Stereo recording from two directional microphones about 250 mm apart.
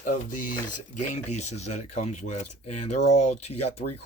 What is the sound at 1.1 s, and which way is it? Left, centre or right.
Speech, left.